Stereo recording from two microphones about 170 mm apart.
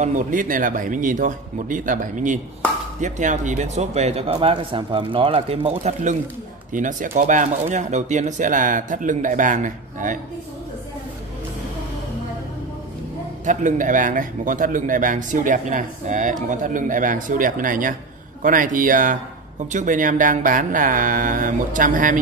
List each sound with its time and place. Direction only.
0.0 s speech: 50° right (ahead or behind)
6.7 s speech: 50° right (ahead or behind)
13.5 s speech: 50° right (ahead or behind)